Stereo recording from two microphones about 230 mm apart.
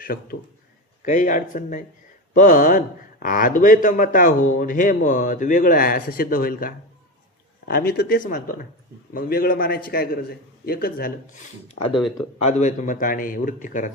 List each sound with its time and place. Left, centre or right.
0.0 s a man's voice: left
11.9 s speech: centre
12.4 s a man's voice: left